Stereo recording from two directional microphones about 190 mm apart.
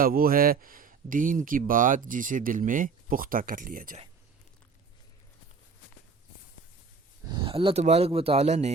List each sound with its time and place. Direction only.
0.0 s speech: 50° right (ahead or behind)
7.3 s speech: 25° right (ahead or behind)